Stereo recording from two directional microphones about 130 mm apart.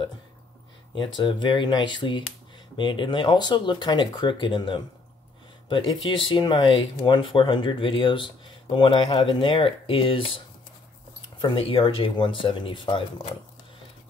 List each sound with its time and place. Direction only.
0.9 s speech: 35° left (ahead or behind)
11.4 s speech: 45° left (ahead or behind)